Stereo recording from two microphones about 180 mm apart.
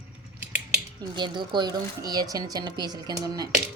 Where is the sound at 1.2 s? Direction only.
25° right (ahead or behind).